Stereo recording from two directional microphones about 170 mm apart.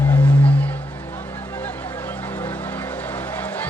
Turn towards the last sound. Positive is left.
turn(degrees=10)  # may be behind; listen again after turning